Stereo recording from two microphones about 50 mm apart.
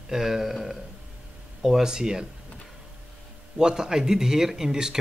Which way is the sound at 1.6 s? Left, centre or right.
Centre.